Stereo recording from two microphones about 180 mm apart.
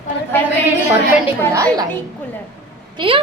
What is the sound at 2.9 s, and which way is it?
Speech, 30° right (ahead or behind).